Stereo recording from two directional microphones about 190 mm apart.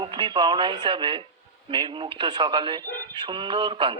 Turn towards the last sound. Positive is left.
turn(degrees=-25)  # may be behind; listen again after turning